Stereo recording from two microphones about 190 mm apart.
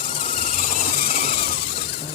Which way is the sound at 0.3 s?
45° left (ahead or behind).